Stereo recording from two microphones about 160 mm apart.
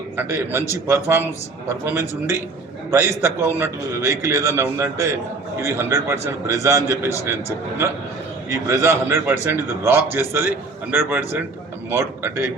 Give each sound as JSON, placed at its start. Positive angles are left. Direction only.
{"t": 0.2, "sound": "a man's voice", "side_deg": -15}
{"t": 8.4, "sound": "a man's voice", "side_deg": -15}